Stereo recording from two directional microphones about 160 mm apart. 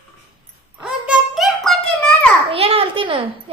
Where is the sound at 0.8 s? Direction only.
5° right (ahead or behind).